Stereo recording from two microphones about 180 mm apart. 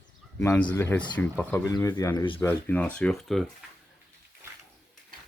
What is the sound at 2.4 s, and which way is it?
Speech, 10° left (ahead or behind).